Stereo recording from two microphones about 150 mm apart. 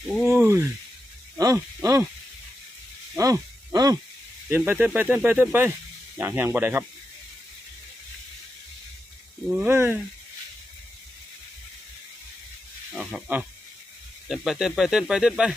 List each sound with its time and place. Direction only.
0.3 s speech: 15° right (ahead or behind)
3.2 s speech: 20° right (ahead or behind)
9.6 s speech: 15° right (ahead or behind)
12.9 s speech: 5° right (ahead or behind)